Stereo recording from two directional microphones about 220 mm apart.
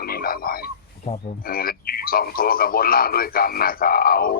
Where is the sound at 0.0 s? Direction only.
40° left (ahead or behind).